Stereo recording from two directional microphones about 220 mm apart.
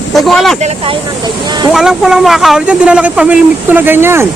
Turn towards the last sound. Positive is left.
turn(degrees=-10)  # may be behind; listen again after turning